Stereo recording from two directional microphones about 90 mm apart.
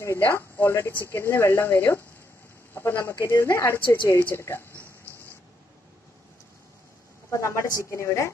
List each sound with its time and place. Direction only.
0.0 s speech: 30° left (ahead or behind)
7.2 s a woman's voice: 35° left (ahead or behind)